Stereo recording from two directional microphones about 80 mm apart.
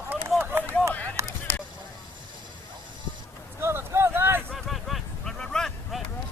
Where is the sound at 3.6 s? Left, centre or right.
Right.